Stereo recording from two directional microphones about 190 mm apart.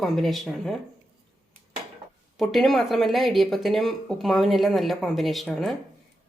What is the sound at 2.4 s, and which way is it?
Speech, centre (ahead or behind).